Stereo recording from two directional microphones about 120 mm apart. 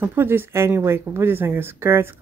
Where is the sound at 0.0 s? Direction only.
20° right (ahead or behind).